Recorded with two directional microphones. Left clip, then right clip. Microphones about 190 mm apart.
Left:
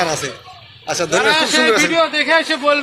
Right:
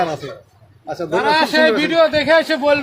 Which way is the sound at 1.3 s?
55° right (ahead or behind).